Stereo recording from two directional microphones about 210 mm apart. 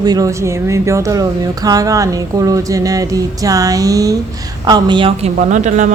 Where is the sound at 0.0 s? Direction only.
15° right (ahead or behind).